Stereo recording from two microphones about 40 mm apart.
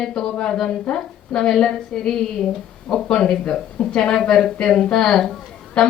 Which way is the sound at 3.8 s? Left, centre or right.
Left.